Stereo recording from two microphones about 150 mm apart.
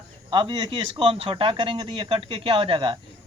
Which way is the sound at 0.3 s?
35° right (ahead or behind).